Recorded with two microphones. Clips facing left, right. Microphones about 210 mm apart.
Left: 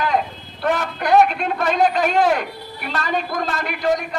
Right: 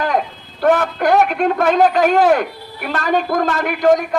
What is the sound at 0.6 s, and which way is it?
A man's voice, 55° right (ahead or behind).